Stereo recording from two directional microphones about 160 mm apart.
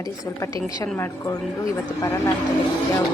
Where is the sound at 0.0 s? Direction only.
20° left (ahead or behind).